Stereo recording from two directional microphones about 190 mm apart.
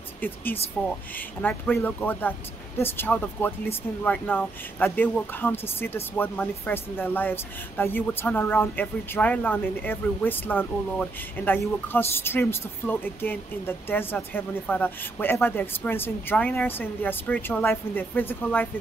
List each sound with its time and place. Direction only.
0.2 s speech: 10° left (ahead or behind)